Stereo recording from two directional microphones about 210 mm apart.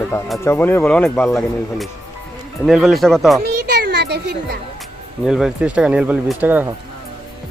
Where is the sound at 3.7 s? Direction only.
45° right (ahead or behind).